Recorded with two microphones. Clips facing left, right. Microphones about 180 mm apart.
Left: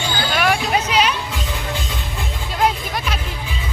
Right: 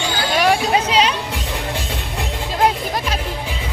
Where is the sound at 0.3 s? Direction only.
30° right (ahead or behind).